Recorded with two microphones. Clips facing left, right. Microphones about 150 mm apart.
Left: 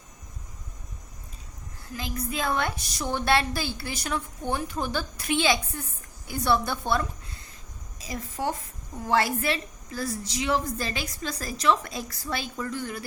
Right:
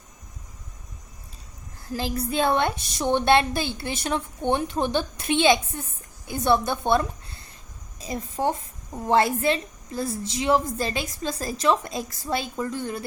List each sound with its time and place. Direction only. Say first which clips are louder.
1.9 s a woman's voice: right 5 dB; 35° right (ahead or behind)